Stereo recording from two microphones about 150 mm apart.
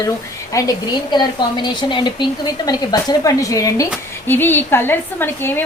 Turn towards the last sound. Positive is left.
turn(degrees=15)  # may be behind; listen again after turning